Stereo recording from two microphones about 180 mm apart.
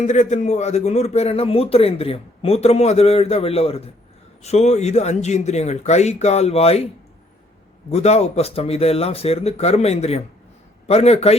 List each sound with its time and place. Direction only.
0.0 s speech: 40° left (ahead or behind)
7.9 s speech: 35° left (ahead or behind)